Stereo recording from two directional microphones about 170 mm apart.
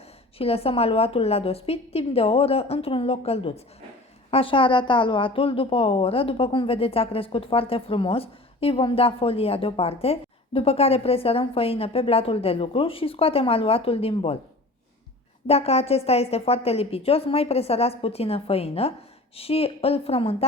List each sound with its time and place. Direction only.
0.3 s a woman's voice: 35° left (ahead or behind)
15.4 s a woman's voice: 35° left (ahead or behind)